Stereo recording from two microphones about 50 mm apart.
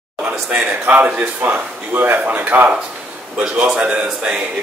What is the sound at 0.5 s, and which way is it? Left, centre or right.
Speech, right.